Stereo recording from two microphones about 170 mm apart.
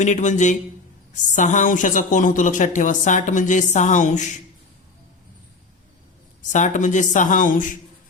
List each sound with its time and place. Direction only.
0.0 s a woman's voice: 45° left (ahead or behind)
6.4 s a woman's voice: 45° left (ahead or behind)